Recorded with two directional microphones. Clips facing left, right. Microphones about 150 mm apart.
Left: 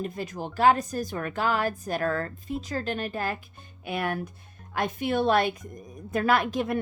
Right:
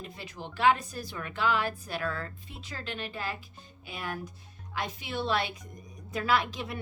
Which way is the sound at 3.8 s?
60° left (ahead or behind).